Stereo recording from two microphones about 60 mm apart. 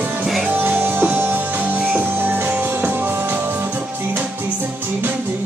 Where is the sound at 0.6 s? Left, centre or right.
Right.